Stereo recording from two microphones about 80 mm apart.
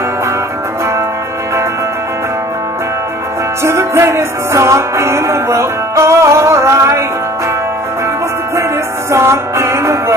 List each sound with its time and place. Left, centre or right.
3.6 s music: right
9.1 s music: right